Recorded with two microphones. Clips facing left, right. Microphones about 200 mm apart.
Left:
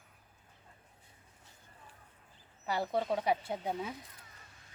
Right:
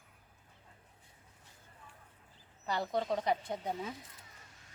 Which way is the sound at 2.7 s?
5° left (ahead or behind).